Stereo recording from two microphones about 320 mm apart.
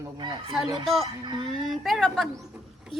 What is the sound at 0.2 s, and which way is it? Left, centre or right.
Speech, centre.